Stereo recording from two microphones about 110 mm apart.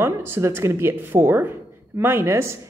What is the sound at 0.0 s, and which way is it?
A woman's voice, 20° right (ahead or behind).